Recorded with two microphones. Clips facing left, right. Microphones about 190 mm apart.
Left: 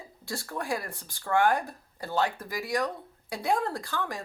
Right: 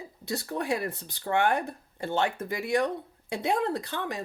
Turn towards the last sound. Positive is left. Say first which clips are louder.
# right 2 dB
turn(degrees=-20)  # may be behind; listen again after turning